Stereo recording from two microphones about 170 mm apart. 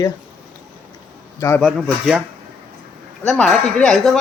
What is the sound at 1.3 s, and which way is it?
Speech, 15° left (ahead or behind).